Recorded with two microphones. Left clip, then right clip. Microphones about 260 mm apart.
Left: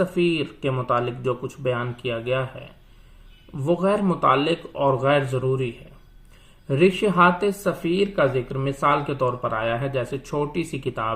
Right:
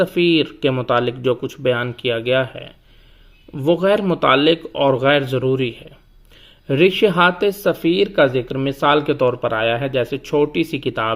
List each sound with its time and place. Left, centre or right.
0.0 s speech: right
3.6 s speech: right